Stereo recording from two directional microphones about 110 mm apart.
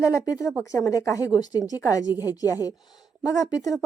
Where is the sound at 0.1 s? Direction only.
30° left (ahead or behind).